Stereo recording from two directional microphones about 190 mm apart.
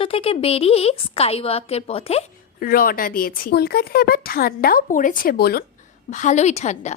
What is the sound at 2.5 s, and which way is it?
Speech, 50° left (ahead or behind).